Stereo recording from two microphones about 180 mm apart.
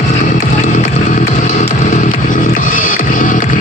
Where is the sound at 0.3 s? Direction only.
45° left (ahead or behind).